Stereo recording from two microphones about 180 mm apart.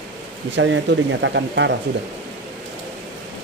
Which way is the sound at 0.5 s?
90° right.